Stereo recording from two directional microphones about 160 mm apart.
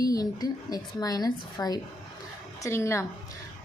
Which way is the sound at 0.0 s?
25° left (ahead or behind).